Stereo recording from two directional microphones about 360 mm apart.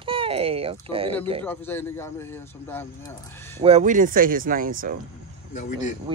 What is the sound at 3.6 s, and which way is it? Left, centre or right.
Speech, centre.